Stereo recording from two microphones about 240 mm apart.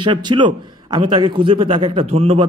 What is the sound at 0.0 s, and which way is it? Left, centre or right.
A man's voice, centre.